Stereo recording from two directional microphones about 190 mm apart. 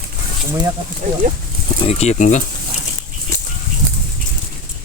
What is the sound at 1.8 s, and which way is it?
Speech, 30° left (ahead or behind).